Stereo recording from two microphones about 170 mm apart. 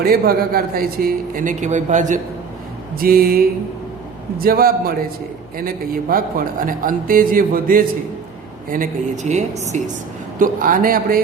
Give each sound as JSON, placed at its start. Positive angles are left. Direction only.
{"t": 0.0, "sound": "a man's voice", "side_deg": -60}
{"t": 3.0, "sound": "a man's voice", "side_deg": -60}